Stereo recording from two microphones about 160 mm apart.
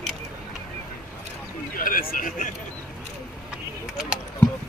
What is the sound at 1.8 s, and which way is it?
Speech, 60° left (ahead or behind).